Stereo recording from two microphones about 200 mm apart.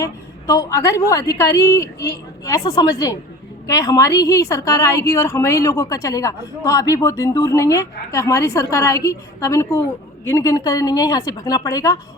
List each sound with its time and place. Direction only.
0.0 s a woman's voice: 15° left (ahead or behind)